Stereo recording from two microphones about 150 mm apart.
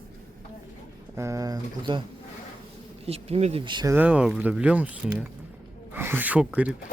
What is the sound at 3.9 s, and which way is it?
Speech, 10° right (ahead or behind).